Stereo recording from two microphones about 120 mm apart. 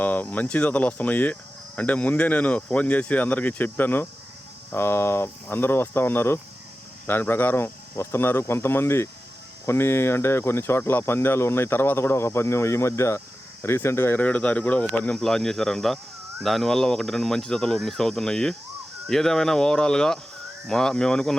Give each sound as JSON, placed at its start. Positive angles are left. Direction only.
{"t": 0.0, "sound": "speech", "side_deg": 15}